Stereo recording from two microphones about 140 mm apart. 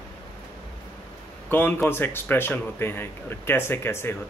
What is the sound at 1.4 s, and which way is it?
A man's voice, 15° left (ahead or behind).